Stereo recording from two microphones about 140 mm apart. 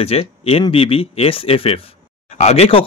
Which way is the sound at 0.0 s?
45° left (ahead or behind).